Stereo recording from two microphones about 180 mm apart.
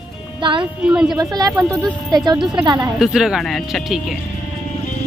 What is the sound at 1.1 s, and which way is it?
Speech, 20° right (ahead or behind).